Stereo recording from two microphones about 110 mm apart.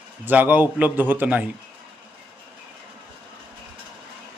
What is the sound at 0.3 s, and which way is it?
Speech, 15° right (ahead or behind).